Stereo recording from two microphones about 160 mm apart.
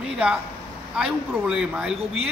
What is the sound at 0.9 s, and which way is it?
Speech, 5° right (ahead or behind).